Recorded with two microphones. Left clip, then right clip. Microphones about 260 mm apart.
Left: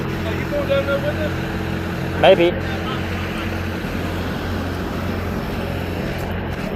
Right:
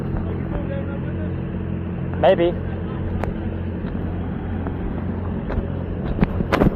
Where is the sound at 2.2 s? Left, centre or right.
Left.